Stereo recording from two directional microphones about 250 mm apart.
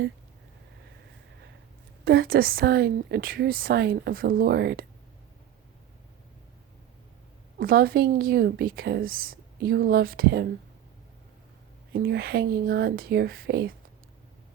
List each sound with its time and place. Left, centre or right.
2.0 s a woman's voice: right
7.6 s a woman's voice: right
11.9 s a woman's voice: right